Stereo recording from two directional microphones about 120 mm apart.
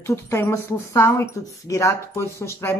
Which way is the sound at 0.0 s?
20° left (ahead or behind).